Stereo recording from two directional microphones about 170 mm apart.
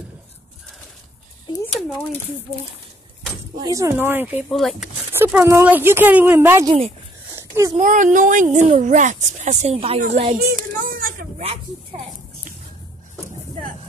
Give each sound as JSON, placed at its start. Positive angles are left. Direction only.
{"t": 3.6, "sound": "speech", "side_deg": -20}
{"t": 4.5, "sound": "speech", "side_deg": 0}
{"t": 5.1, "sound": "speech", "side_deg": -15}
{"t": 7.3, "sound": "a sound", "side_deg": -15}
{"t": 7.8, "sound": "speech", "side_deg": -50}
{"t": 10.3, "sound": "a sound", "side_deg": -55}